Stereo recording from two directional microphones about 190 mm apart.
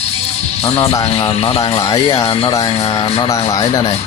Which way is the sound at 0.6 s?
30° left (ahead or behind).